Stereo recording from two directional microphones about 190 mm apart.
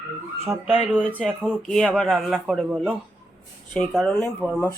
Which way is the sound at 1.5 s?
5° left (ahead or behind).